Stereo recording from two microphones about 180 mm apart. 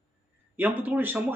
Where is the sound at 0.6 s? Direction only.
10° right (ahead or behind).